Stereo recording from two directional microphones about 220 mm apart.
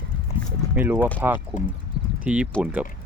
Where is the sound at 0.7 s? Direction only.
10° right (ahead or behind).